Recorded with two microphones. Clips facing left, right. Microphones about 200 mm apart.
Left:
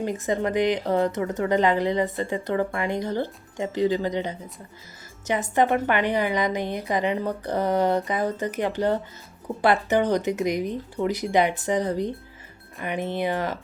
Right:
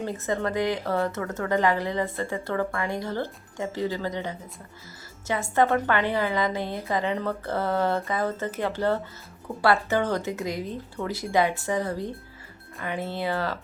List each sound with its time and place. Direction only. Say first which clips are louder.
0.0 s a woman's voice: left 3 dB; 15° left (ahead or behind)